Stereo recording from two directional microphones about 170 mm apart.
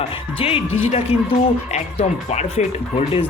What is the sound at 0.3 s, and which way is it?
Speech, 35° left (ahead or behind).